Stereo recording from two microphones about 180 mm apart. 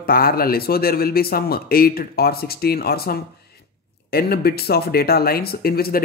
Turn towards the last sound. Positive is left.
turn(degrees=55)  # may be behind; listen again after turning